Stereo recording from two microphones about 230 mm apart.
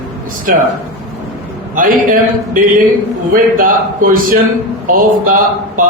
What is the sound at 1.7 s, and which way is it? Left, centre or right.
A man's voice, right.